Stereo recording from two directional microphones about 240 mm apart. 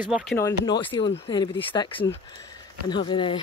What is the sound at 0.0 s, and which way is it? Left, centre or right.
Speech, centre.